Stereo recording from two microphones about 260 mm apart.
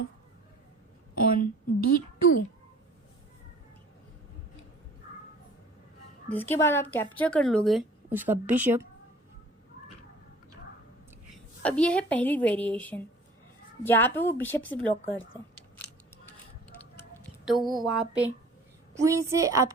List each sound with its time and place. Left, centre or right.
1.1 s a woman's voice: left
6.2 s a woman's voice: centre
11.6 s a woman's voice: centre
17.0 s a woman's voice: centre